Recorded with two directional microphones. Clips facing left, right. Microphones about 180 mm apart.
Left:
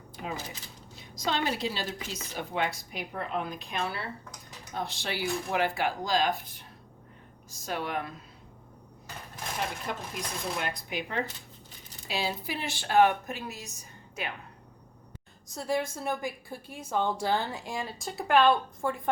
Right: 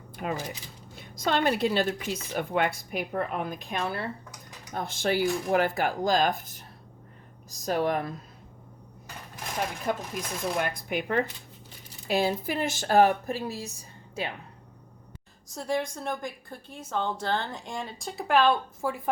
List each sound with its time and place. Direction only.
0.2 s a woman's voice: 60° right (ahead or behind); by 8.1 s 40° right (ahead or behind)
10.2 s speech: 55° right (ahead or behind); by 14.3 s 30° right (ahead or behind)
15.4 s a woman's voice: centre (ahead or behind)